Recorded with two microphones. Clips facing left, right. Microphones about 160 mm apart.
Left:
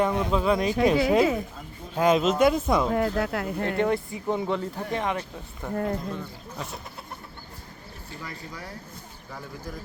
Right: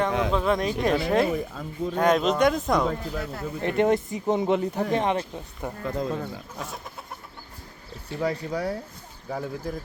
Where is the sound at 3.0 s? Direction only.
85° left.